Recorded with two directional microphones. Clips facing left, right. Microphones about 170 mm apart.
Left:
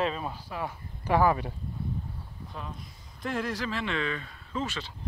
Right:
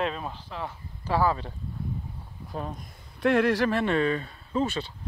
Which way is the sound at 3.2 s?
70° right (ahead or behind).